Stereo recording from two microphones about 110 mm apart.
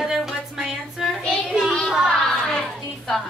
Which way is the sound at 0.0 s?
5° right (ahead or behind).